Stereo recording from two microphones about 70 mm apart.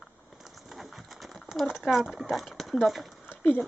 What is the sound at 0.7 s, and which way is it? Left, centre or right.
Bird, centre.